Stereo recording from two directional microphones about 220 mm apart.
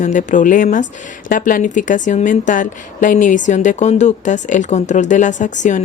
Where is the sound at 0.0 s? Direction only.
35° left (ahead or behind).